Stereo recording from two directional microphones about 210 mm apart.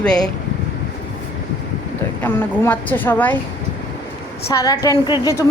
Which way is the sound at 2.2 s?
10° left (ahead or behind).